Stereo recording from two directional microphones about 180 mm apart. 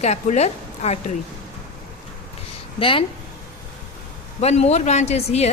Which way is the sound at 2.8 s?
30° left (ahead or behind).